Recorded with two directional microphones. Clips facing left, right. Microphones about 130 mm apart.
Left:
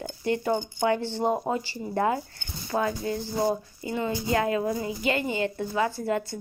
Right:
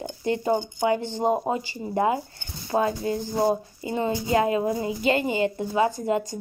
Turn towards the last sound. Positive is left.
turn(degrees=-20)  # may be behind; listen again after turning